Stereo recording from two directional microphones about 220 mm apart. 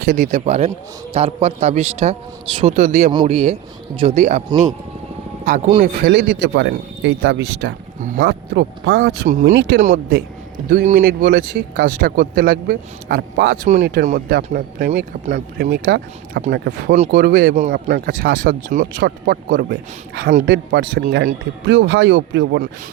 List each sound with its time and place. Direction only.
0.0 s a man's voice: 35° right (ahead or behind)
3.1 s a man's voice: 25° right (ahead or behind)
5.5 s speech: 35° right (ahead or behind); by 9.8 s 55° right (ahead or behind)
9.8 s speech: 40° right (ahead or behind); by 22.7 s 55° right (ahead or behind)